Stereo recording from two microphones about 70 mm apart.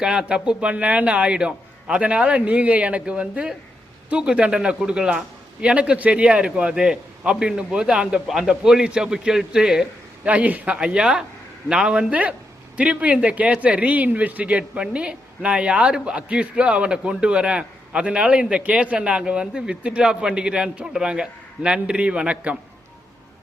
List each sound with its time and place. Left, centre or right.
0.0 s speech: centre
10.2 s speech: right